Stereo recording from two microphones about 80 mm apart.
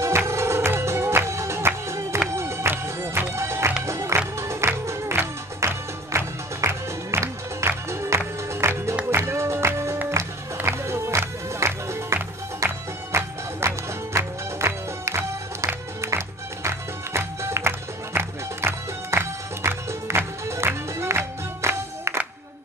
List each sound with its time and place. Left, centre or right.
0.3 s music: right